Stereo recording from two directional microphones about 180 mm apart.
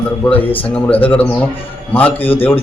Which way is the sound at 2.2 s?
30° left (ahead or behind).